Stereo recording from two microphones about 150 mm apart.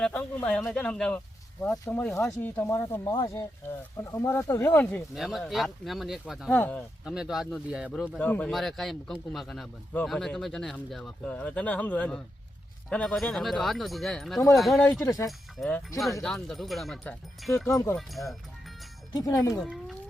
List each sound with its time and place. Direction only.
0.0 s speech: 5° left (ahead or behind)
5.1 s a man's voice: centre (ahead or behind)
6.5 s speech: 10° left (ahead or behind)
7.0 s a man's voice: 5° right (ahead or behind)
8.2 s a man's voice: 10° left (ahead or behind)
14.8 s speech: 20° left (ahead or behind)
16.2 s a man's voice: centre (ahead or behind)
17.7 s speech: 20° left (ahead or behind)
17.9 s a man's voice: centre (ahead or behind)
19.1 s speech: 25° left (ahead or behind)
19.5 s speech: 5° left (ahead or behind)